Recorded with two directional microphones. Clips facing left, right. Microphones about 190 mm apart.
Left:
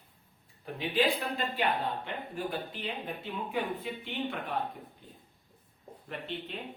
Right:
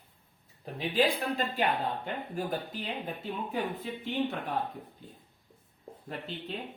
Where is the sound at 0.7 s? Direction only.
40° right (ahead or behind).